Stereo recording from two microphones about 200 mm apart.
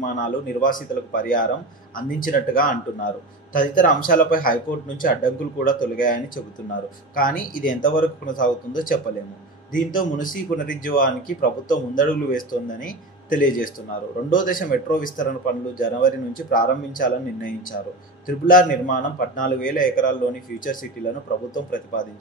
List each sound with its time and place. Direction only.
0.0 s speech: 40° left (ahead or behind)